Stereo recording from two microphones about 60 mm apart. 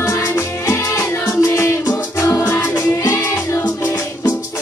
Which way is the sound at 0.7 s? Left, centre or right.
Left.